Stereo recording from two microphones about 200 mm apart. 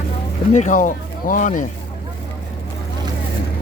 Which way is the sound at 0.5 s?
40° left (ahead or behind).